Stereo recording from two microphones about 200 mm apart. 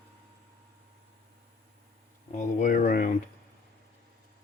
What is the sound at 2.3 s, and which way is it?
Speech, 40° left (ahead or behind).